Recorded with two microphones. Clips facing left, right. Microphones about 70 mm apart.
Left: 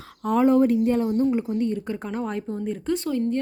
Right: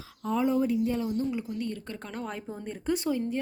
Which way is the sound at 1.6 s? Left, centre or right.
Left.